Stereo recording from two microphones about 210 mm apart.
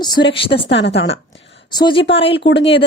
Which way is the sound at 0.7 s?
55° left (ahead or behind).